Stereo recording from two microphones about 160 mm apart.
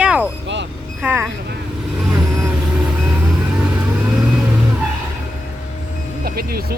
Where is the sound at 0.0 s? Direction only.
5° right (ahead or behind).